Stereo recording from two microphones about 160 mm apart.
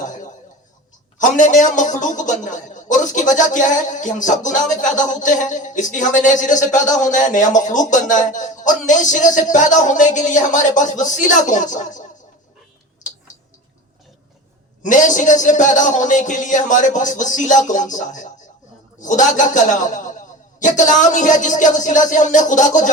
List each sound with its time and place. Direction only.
0.0 s a sound: 50° left (ahead or behind)
1.2 s a man's voice: 50° left (ahead or behind)
13.0 s tick: 50° left (ahead or behind)
14.8 s a man's voice: 50° left (ahead or behind)